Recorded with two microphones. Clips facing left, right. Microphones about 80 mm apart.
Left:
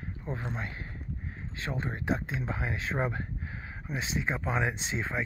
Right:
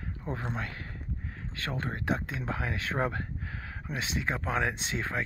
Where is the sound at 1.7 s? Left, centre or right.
Right.